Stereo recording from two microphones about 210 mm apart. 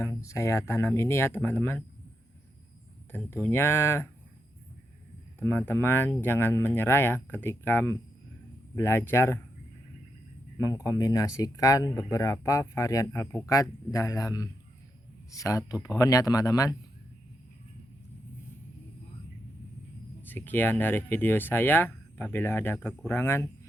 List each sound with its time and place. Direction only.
0.0 s speech: 15° left (ahead or behind)
3.1 s speech: 10° left (ahead or behind)
5.4 s speech: 10° left (ahead or behind)
10.6 s speech: 15° left (ahead or behind)
20.2 s speech: 10° left (ahead or behind)